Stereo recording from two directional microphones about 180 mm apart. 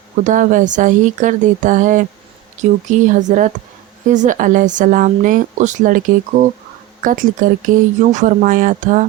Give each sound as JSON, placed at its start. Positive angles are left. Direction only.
{"t": 0.3, "sound": "speech", "side_deg": -45}
{"t": 7.0, "sound": "speech", "side_deg": -45}